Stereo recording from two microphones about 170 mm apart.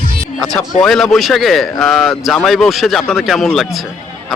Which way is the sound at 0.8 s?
Centre (ahead or behind).